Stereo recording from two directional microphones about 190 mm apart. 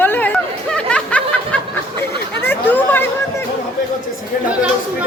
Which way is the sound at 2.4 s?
10° left (ahead or behind).